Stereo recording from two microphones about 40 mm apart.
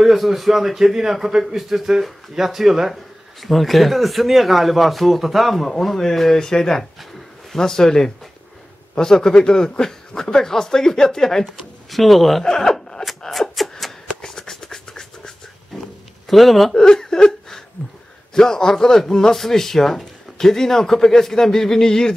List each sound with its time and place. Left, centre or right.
0.0 s a man's voice: centre
13.2 s beatboxing: centre
14.2 s a sound: centre
16.3 s speech: centre
16.7 s chuckle: centre
18.3 s a man's voice: centre